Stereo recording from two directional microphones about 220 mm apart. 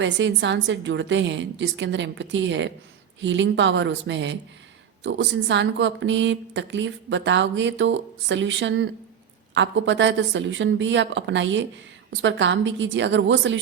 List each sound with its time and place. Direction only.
0.0 s speech: 55° right (ahead or behind)